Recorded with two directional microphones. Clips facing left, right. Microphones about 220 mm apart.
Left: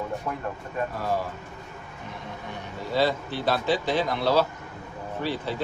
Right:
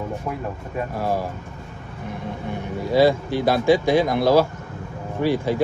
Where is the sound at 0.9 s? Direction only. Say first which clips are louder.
Right 6 dB; 40° right (ahead or behind).